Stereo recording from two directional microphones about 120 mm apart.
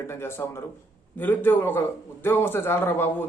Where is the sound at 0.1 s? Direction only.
20° left (ahead or behind).